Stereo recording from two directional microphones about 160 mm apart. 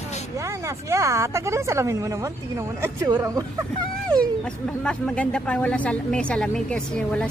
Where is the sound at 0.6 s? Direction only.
20° right (ahead or behind).